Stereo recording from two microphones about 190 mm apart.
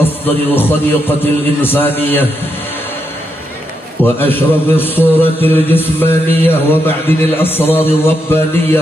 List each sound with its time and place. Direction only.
0.6 s a man's voice: 10° left (ahead or behind)
4.0 s a man's voice: 10° left (ahead or behind)